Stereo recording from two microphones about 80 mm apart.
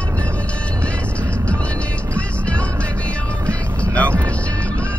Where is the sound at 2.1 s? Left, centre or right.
Centre.